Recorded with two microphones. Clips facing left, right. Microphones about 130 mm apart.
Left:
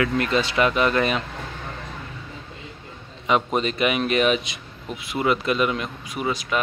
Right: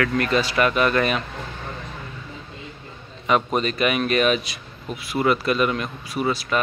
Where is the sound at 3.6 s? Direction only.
20° left (ahead or behind).